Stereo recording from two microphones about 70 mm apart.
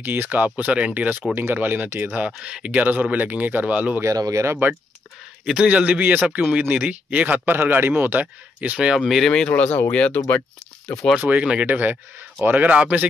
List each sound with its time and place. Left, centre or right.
0.0 s a man's voice: right
2.3 s a man's voice: centre
4.0 s speech: right
5.4 s a man's voice: centre
9.5 s speech: left
11.1 s a man's voice: right